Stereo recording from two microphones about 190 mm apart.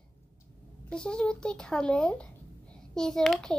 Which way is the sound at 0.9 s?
5° left (ahead or behind).